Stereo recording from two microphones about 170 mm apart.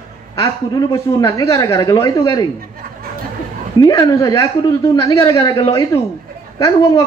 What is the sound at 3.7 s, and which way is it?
A man's voice, 20° left (ahead or behind).